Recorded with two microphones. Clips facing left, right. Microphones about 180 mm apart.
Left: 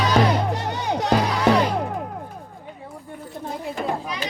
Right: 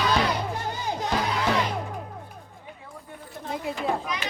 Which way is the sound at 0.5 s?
70° left (ahead or behind).